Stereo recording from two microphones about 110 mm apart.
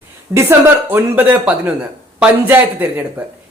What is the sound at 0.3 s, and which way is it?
Speech, 20° right (ahead or behind).